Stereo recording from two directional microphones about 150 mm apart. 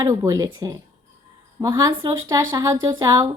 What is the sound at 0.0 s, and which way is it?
Speech, 20° right (ahead or behind).